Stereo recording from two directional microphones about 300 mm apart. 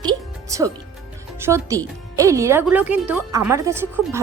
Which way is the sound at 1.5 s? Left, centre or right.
Centre.